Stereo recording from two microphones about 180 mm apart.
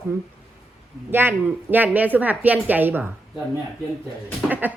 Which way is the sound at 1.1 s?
10° right (ahead or behind).